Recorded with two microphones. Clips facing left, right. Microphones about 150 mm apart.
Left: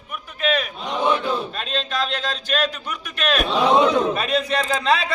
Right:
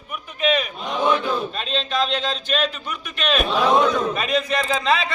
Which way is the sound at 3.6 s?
20° left (ahead or behind).